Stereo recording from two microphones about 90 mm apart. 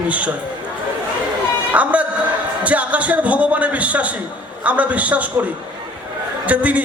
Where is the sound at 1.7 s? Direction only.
15° right (ahead or behind).